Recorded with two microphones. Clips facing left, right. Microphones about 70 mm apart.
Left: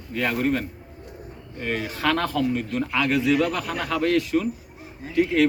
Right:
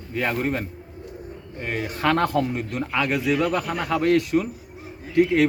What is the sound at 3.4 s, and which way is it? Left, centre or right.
Speech, centre.